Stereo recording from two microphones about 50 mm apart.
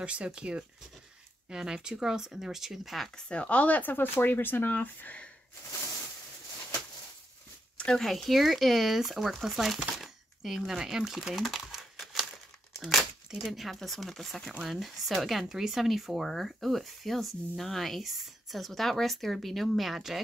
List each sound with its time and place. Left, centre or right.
0.0 s speech: right; by 3.1 s centre
3.2 s speech: left
3.9 s speech: left
7.7 s a sound: left
8.0 s speech: centre
9.9 s coin: centre
10.7 s speech: centre
12.7 s crumpling: centre
13.3 s speech: centre